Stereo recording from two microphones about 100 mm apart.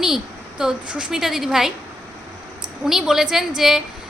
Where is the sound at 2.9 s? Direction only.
5° right (ahead or behind).